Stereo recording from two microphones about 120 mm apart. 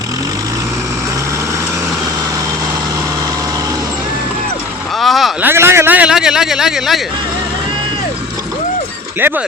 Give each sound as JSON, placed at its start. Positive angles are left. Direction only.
{"t": 4.9, "sound": "vehicle", "side_deg": 0}
{"t": 5.4, "sound": "a sound", "side_deg": -20}
{"t": 9.2, "sound": "speech", "side_deg": -20}